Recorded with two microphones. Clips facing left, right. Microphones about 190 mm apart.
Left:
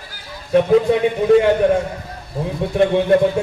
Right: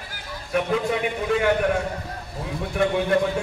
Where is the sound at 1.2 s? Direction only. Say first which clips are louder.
Left 9 dB; 30° left (ahead or behind).